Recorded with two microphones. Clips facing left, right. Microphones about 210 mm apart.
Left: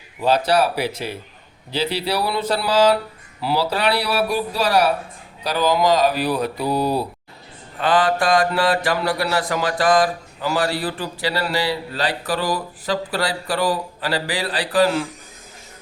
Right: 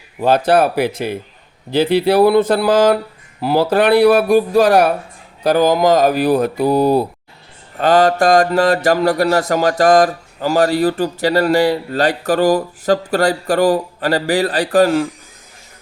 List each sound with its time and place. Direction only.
0.2 s mantra: 50° right (ahead or behind)